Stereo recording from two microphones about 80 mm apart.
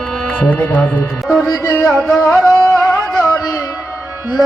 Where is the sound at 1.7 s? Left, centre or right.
Left.